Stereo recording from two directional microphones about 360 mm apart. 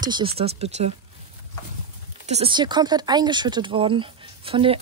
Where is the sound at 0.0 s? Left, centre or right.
Centre.